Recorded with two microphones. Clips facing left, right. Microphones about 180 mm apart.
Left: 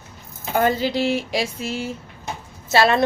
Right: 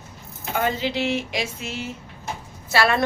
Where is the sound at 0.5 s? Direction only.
40° left (ahead or behind).